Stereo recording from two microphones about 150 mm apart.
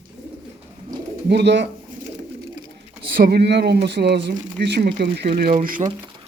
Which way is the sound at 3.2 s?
90° right.